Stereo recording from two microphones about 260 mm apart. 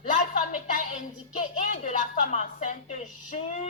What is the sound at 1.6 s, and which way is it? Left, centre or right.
A woman's voice, left.